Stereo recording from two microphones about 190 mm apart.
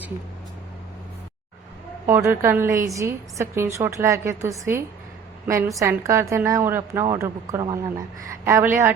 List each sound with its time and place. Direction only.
2.0 s a woman's voice: 10° right (ahead or behind)